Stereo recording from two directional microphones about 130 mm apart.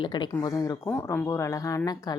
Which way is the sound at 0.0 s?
35° left (ahead or behind).